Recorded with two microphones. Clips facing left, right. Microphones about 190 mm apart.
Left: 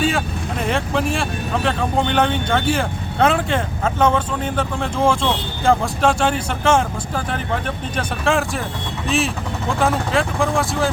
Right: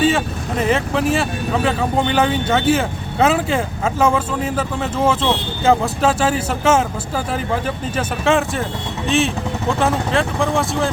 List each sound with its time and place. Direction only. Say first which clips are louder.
0.0 s speech: right 3 dB; centre (ahead or behind)